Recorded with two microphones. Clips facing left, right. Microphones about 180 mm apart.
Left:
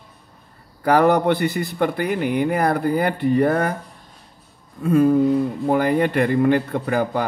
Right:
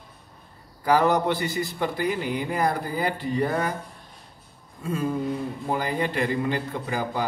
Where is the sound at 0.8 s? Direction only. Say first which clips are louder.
Left 5 dB; 60° left (ahead or behind).